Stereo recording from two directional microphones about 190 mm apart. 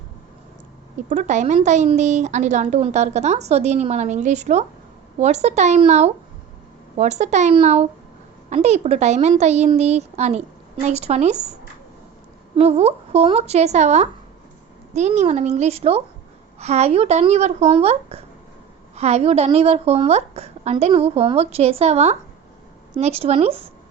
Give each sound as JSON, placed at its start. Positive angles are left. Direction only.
{"t": 1.1, "sound": "a woman's voice", "side_deg": -40}
{"t": 12.5, "sound": "a woman's voice", "side_deg": -35}